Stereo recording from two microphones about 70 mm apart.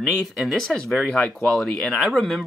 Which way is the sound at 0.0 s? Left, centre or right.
Centre.